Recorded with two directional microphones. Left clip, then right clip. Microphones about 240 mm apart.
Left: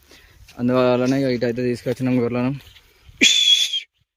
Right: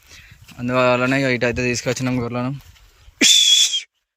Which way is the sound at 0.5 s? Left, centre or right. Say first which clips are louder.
Right 1 dB; centre.